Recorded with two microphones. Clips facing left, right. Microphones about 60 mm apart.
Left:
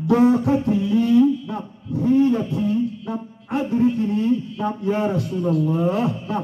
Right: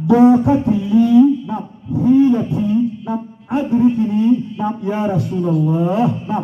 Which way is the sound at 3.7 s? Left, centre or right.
Right.